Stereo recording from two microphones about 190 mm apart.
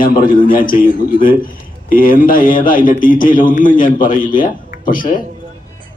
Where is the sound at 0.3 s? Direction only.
45° left (ahead or behind).